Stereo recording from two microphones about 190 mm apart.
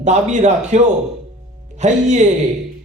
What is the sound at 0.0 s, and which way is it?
A man's voice, 40° right (ahead or behind).